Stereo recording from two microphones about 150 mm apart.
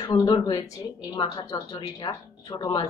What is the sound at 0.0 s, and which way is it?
A woman's voice, 30° left (ahead or behind).